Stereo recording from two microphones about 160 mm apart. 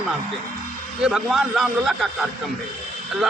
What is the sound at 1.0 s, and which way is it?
A man's voice, 5° right (ahead or behind).